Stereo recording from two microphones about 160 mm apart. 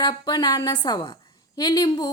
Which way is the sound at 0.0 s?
25° left (ahead or behind).